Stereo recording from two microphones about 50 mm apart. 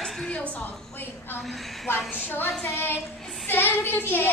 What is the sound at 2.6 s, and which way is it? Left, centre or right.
Speech, left.